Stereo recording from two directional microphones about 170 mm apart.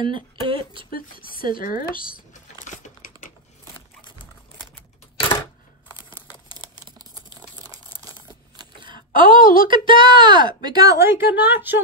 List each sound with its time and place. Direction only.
0.0 s speech: 30° right (ahead or behind)
0.9 s speech: 60° left (ahead or behind)
2.3 s crumpling: 45° left (ahead or behind)
6.5 s crumpling: 25° right (ahead or behind)
8.5 s a sound: 25° right (ahead or behind)
8.9 s a sound: 55° left (ahead or behind)
9.4 s a woman's voice: 55° left (ahead or behind)
9.7 s speech: 30° right (ahead or behind); by 11.8 s 10° right (ahead or behind)